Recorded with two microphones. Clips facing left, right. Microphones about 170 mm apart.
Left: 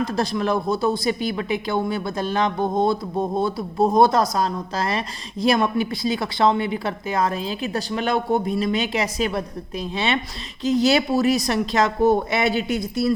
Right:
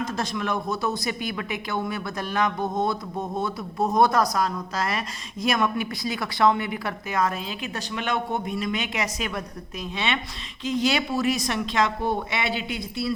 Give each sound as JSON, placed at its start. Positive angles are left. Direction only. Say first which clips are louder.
{"t": 0.0, "sound": "speech", "louder": "left 5 dB", "side_deg": 35}